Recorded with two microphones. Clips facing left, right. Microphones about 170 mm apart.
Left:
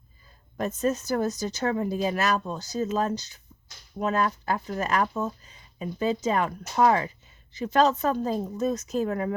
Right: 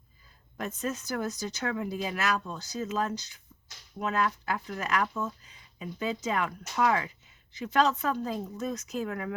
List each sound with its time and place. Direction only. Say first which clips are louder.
0.5 s speech: left 7 dB; 40° left (ahead or behind)